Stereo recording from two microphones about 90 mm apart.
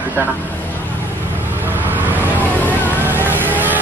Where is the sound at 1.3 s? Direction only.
20° right (ahead or behind).